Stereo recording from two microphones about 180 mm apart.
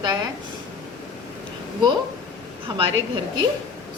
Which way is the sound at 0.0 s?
20° right (ahead or behind).